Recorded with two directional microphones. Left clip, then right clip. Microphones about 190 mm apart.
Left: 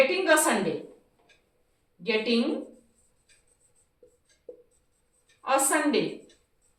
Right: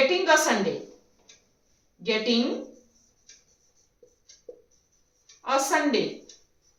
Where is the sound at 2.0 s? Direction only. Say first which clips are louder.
Right 1 dB; 15° right (ahead or behind).